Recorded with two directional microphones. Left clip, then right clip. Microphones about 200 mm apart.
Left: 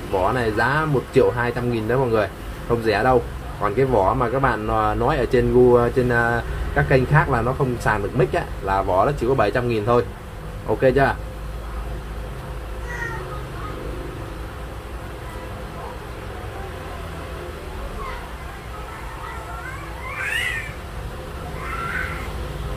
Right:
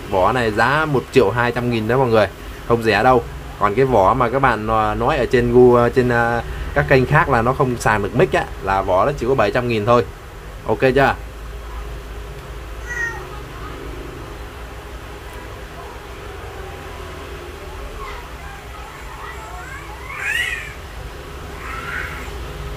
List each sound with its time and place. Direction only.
0.2 s speech: 20° right (ahead or behind)